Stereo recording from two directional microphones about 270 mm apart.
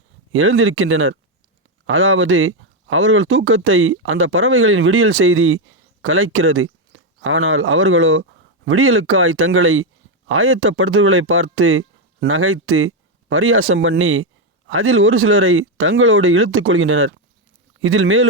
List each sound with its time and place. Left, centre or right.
0.3 s speech: right